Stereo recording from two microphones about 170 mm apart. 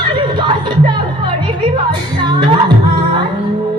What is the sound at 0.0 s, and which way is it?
Music, 25° right (ahead or behind).